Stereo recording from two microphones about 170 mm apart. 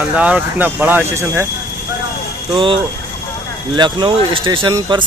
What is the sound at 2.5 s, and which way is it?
Speech, 30° right (ahead or behind).